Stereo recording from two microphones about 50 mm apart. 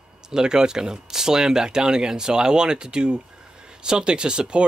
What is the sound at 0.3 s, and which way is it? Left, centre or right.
Speech, centre.